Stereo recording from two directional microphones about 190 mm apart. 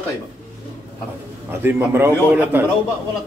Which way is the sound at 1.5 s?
10° right (ahead or behind).